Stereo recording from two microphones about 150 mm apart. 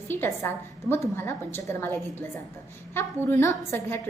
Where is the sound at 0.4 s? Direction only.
15° left (ahead or behind).